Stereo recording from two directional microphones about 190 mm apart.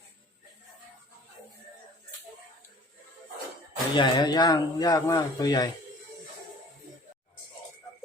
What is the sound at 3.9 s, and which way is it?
Speech, 20° left (ahead or behind).